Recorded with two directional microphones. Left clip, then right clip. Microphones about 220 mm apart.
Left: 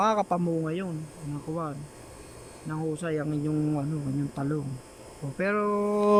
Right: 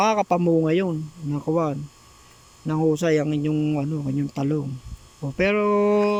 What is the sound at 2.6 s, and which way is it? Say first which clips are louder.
Speech: right 11 dB; 25° right (ahead or behind).